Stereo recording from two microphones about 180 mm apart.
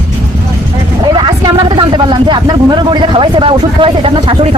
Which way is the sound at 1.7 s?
25° right (ahead or behind).